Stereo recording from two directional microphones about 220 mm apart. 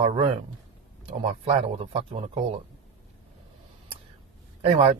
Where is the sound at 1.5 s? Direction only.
25° right (ahead or behind).